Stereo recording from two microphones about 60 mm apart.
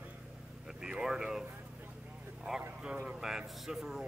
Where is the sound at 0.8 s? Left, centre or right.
Centre.